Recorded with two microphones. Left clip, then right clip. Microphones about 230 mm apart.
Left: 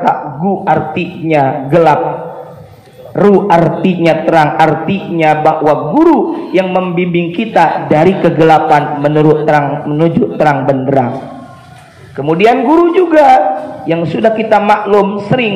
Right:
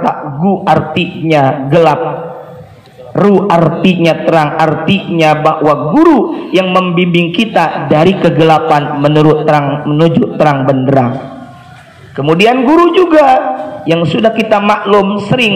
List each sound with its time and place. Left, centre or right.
0.0 s a man's voice: right
3.2 s a man's voice: right
12.2 s a man's voice: right